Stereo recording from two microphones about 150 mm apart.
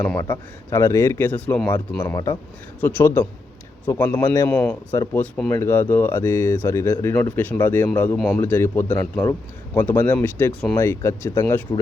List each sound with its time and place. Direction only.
0.2 s speech: 15° left (ahead or behind)
2.1 s speech: 25° left (ahead or behind)
2.8 s speech: 15° left (ahead or behind)